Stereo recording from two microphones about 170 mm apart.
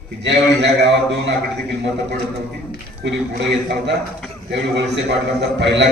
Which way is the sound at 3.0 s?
90° right.